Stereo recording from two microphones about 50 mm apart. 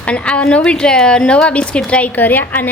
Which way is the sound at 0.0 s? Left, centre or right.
Left.